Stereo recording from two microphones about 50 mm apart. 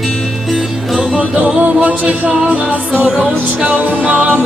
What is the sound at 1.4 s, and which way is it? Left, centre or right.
Music, right.